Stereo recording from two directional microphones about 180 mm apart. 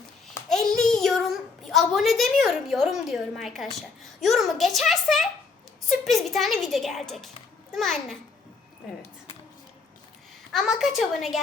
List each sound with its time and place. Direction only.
0.5 s a sound: centre (ahead or behind)
3.8 s a child's voice: centre (ahead or behind)
10.5 s a child's voice: centre (ahead or behind)